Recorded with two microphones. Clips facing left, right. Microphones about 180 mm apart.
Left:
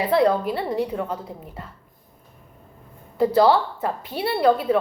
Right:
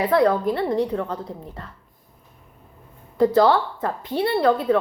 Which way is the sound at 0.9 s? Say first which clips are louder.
Right 1 dB; 10° left (ahead or behind).